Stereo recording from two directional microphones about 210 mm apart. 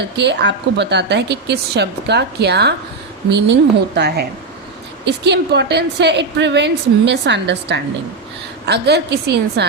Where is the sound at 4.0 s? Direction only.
50° right (ahead or behind).